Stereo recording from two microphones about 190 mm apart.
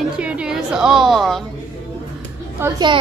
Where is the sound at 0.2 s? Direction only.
5° right (ahead or behind).